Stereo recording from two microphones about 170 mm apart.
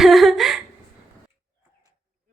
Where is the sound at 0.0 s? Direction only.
Centre (ahead or behind).